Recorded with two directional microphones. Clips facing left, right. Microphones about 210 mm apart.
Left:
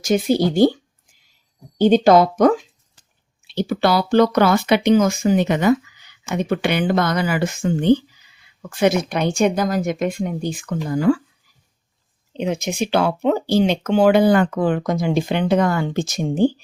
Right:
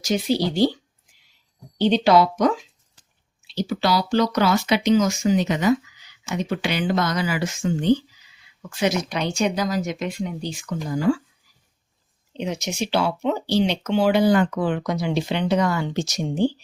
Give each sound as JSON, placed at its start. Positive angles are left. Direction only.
{"t": 0.0, "sound": "speech", "side_deg": 50}
{"t": 1.8, "sound": "speech", "side_deg": 50}
{"t": 12.4, "sound": "speech", "side_deg": 55}